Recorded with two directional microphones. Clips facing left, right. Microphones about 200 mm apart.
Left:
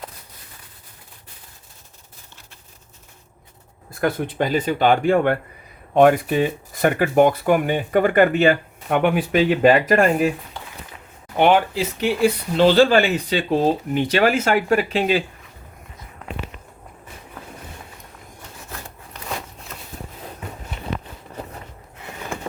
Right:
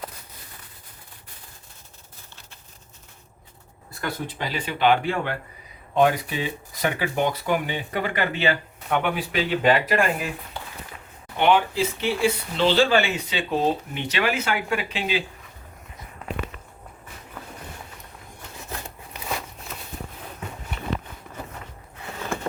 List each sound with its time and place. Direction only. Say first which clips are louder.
4.0 s speech: left 9 dB; 50° left (ahead or behind)
11.3 s speech: left 3 dB; 40° left (ahead or behind)